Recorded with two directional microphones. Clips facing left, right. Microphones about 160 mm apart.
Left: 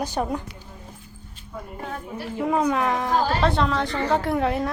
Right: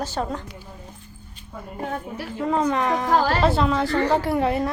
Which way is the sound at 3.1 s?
60° right (ahead or behind).